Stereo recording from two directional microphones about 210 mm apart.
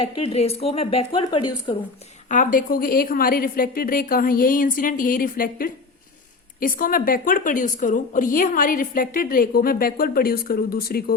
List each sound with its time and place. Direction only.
0.0 s speech: 30° left (ahead or behind)
2.3 s a woman's voice: 40° left (ahead or behind)